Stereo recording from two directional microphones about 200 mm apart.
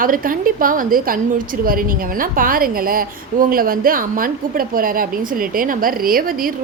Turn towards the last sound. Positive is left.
turn(degrees=-45)  # may be behind; listen again after turning